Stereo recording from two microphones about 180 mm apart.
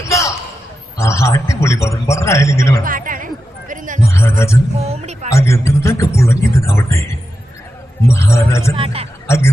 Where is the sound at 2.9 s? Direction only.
50° right (ahead or behind).